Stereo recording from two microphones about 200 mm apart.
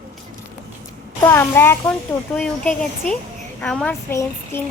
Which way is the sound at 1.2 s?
10° left (ahead or behind).